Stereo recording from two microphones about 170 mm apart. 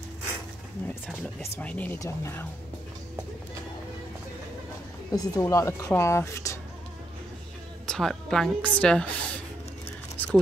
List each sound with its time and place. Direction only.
1.6 s speech: 10° left (ahead or behind)
5.1 s speech: 20° left (ahead or behind)
7.8 s a woman's voice: 5° left (ahead or behind)
10.1 s a sound: 10° left (ahead or behind)